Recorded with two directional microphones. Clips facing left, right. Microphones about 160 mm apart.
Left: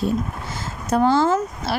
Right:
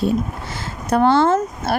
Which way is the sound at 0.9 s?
65° right (ahead or behind).